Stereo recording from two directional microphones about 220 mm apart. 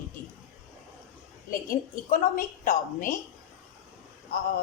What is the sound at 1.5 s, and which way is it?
A woman's voice, 40° left (ahead or behind).